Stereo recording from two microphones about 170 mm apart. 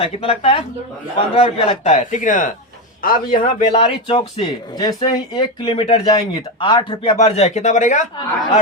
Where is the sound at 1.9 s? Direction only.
50° left (ahead or behind).